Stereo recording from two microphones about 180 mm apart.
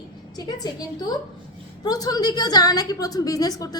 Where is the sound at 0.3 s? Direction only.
20° left (ahead or behind).